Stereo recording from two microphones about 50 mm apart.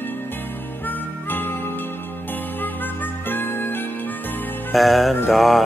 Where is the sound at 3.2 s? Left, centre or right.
Left.